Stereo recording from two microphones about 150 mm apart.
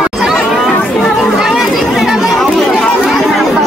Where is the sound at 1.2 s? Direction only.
Centre (ahead or behind).